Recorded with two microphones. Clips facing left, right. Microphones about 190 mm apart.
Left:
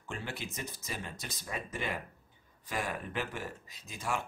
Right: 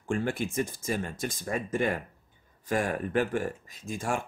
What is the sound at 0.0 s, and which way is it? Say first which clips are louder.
Speech: right 11 dB; 50° right (ahead or behind).